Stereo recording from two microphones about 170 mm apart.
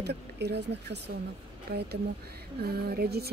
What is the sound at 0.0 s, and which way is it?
A woman's voice, 75° right (ahead or behind).